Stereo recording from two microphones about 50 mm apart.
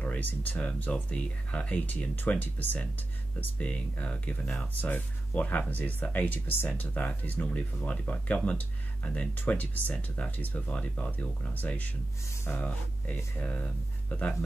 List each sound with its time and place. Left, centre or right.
0.0 s speech: left
1.1 s speech: left